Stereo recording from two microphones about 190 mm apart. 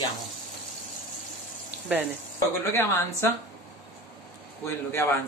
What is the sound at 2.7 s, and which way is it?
Speech, 15° left (ahead or behind).